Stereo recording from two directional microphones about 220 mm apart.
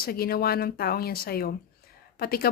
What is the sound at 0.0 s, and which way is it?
Speech, 45° left (ahead or behind).